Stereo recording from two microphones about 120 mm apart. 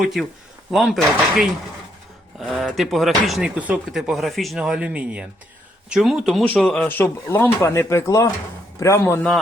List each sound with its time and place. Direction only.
0.0 s speech: centre (ahead or behind)
3.5 s speech: 10° right (ahead or behind); by 6.9 s 5° left (ahead or behind)
6.9 s speech: 20° left (ahead or behind)